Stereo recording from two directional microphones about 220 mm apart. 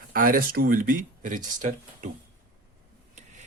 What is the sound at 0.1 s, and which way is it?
Speech, 40° right (ahead or behind).